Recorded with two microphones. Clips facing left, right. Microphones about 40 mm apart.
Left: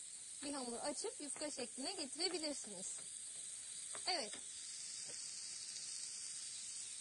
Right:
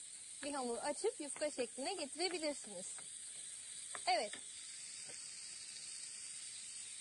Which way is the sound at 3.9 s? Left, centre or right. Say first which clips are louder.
Right 6 dB; right.